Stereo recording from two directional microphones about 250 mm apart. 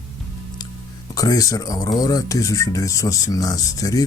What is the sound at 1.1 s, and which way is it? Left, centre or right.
Speech, centre.